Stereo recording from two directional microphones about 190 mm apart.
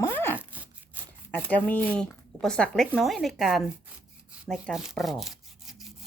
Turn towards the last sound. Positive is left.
turn(degrees=0)  # may be behind; listen again after turning